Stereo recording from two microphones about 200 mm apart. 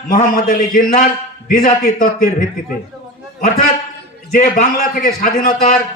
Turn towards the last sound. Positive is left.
turn(degrees=45)  # may be behind; listen again after turning